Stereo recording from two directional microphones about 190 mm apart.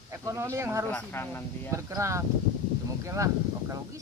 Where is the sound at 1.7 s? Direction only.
15° right (ahead or behind).